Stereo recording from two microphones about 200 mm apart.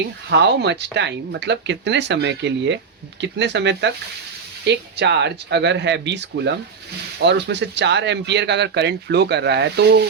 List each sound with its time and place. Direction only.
0.3 s speech: 60° right (ahead or behind)